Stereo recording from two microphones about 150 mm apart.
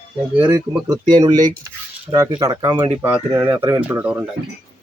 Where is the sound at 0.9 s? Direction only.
25° right (ahead or behind); by 4.3 s 10° right (ahead or behind).